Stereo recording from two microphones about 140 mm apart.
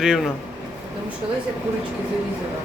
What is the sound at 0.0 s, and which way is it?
Speech, 5° right (ahead or behind).